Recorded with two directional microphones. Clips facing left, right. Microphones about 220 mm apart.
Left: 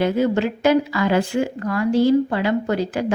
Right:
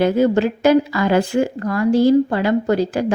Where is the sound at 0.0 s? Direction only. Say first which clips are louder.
Right 3 dB; 40° right (ahead or behind).